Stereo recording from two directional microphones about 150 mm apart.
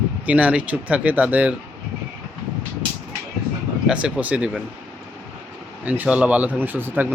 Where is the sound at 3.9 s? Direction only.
5° right (ahead or behind).